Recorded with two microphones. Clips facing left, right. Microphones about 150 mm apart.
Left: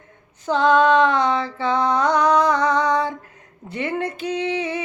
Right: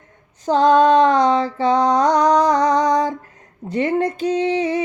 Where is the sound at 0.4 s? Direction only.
40° right (ahead or behind).